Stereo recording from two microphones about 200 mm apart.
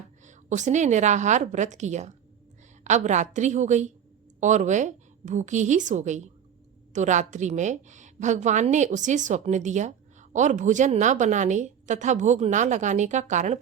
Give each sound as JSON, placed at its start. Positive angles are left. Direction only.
{"t": 0.3, "sound": "a woman's voice", "side_deg": -35}